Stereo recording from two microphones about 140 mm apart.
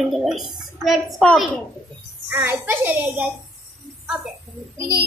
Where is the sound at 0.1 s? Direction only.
Centre (ahead or behind).